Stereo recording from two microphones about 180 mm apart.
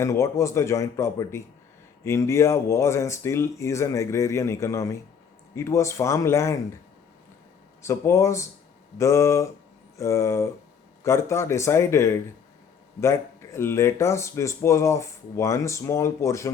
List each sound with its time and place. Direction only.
0.0 s speech: 15° left (ahead or behind)
7.8 s speech: 15° left (ahead or behind)